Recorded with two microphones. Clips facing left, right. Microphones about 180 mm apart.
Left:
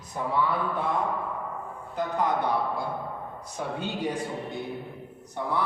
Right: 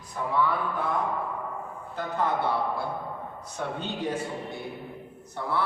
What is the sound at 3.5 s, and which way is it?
A man's voice, 10° left (ahead or behind).